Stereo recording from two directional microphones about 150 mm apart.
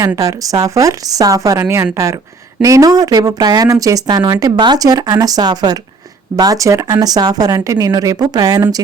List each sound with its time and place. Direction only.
0.0 s speech: 20° right (ahead or behind)